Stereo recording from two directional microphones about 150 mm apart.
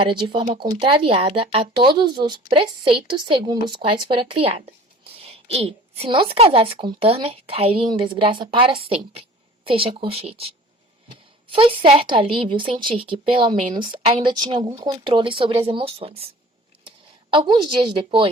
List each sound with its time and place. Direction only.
0.0 s speech: 35° right (ahead or behind)
17.3 s speech: 35° right (ahead or behind)